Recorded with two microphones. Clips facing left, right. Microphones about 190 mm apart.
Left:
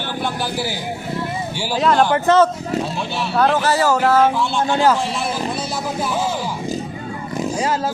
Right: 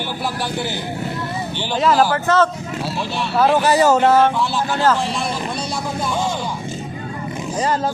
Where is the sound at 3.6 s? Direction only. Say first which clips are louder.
Right 3 dB; 15° right (ahead or behind).